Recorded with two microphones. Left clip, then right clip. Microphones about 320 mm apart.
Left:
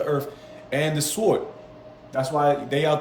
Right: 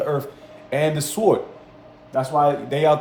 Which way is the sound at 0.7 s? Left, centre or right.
Centre.